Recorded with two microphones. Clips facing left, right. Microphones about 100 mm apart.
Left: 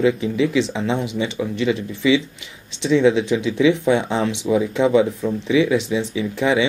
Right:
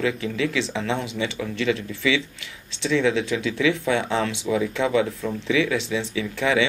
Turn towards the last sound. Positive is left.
turn(degrees=20)  # may be behind; listen again after turning